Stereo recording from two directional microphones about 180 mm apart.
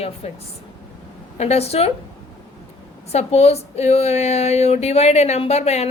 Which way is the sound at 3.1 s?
35° left (ahead or behind).